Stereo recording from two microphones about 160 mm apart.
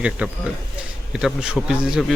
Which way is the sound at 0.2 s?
10° right (ahead or behind).